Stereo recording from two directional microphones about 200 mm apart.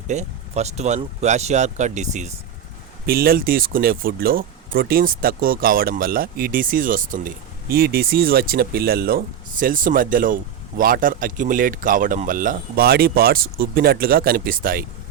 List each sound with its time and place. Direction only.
0.1 s speech: 35° right (ahead or behind)
3.1 s speech: 50° right (ahead or behind)